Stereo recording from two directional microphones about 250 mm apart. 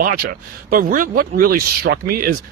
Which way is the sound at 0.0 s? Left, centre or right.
Right.